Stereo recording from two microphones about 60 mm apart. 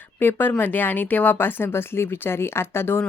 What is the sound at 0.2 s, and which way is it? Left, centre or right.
Speech, left.